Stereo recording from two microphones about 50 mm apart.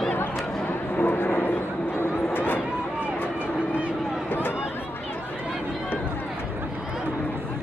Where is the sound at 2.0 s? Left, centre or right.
Left.